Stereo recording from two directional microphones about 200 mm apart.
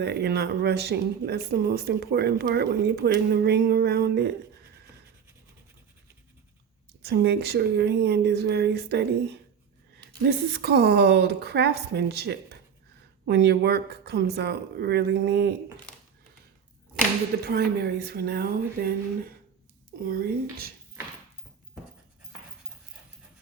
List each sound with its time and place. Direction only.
0.0 s speech: 55° right (ahead or behind)
7.0 s speech: 55° right (ahead or behind)
10.2 s speech: 55° right (ahead or behind)
17.4 s speech: 50° right (ahead or behind)
20.1 s speech: 50° right (ahead or behind)